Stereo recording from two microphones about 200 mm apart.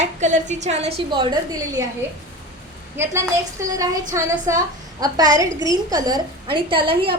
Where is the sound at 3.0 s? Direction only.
10° right (ahead or behind).